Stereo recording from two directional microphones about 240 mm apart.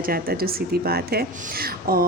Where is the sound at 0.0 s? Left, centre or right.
Right.